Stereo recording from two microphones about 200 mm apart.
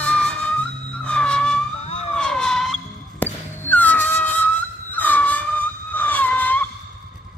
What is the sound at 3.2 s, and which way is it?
Music, 10° left (ahead or behind).